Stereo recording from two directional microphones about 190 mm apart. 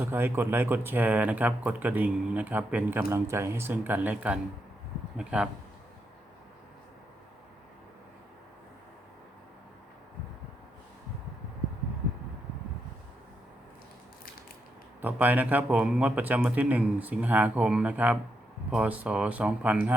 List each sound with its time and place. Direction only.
0.0 s speech: 10° right (ahead or behind)
15.0 s speech: 10° right (ahead or behind)